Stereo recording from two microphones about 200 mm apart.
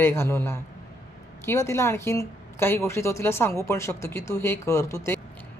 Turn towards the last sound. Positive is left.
turn(degrees=15)  # may be behind; listen again after turning